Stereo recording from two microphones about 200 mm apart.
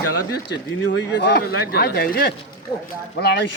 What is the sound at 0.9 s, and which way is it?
Speech, 60° left (ahead or behind).